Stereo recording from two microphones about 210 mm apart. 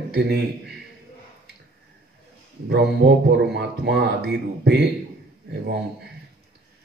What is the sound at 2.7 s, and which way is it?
Speech, 50° right (ahead or behind).